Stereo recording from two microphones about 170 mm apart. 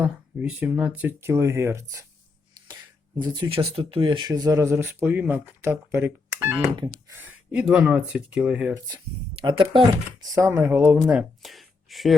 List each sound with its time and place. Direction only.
0.0 s speech: 10° right (ahead or behind)
3.2 s speech: 30° right (ahead or behind); by 8.7 s 5° right (ahead or behind)
9.4 s speech: 30° right (ahead or behind)
10.3 s speech: 15° right (ahead or behind); by 12.1 s centre (ahead or behind)